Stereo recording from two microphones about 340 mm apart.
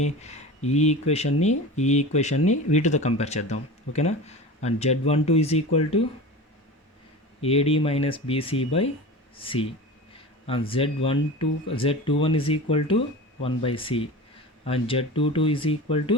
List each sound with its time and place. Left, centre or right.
0.0 s speech: centre
7.4 s speech: centre